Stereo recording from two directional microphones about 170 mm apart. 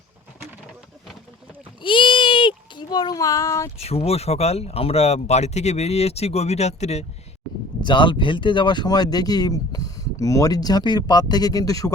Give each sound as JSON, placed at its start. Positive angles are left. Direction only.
{"t": 1.8, "sound": "speech", "side_deg": 30}
{"t": 3.8, "sound": "speech", "side_deg": 35}
{"t": 7.8, "sound": "speech", "side_deg": 25}